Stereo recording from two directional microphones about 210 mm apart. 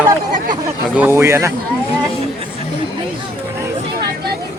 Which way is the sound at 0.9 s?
10° right (ahead or behind).